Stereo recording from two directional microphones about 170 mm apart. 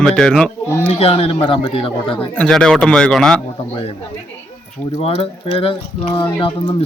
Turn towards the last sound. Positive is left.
turn(degrees=30)  # may be behind; listen again after turning